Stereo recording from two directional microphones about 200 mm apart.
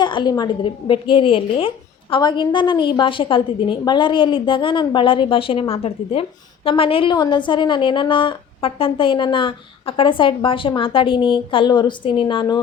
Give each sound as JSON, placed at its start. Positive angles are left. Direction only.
{"t": 0.0, "sound": "a woman's voice", "side_deg": 20}